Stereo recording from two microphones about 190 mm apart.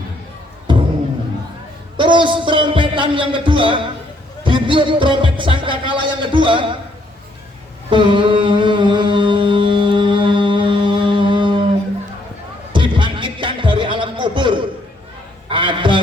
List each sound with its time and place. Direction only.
2.0 s music: 25° right (ahead or behind)
7.9 s mantra: 25° right (ahead or behind)
12.7 s a sound: 25° right (ahead or behind)